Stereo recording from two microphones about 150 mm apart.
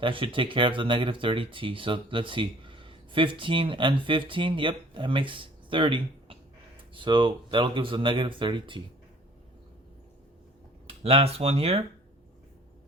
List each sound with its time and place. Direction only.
0.0 s speech: 35° right (ahead or behind)
11.0 s speech: 40° right (ahead or behind)